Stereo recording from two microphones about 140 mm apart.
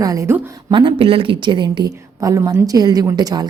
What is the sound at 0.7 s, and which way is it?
A woman's voice, 35° right (ahead or behind).